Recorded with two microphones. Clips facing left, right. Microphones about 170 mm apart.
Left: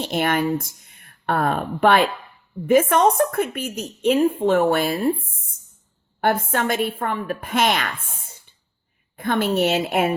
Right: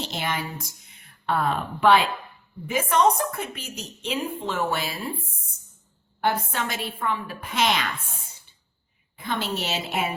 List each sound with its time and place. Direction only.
0.0 s a woman's voice: 55° left (ahead or behind)
6.2 s a woman's voice: 50° left (ahead or behind)